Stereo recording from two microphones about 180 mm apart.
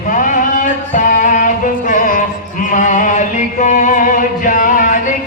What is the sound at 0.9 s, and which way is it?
Music, 45° left (ahead or behind).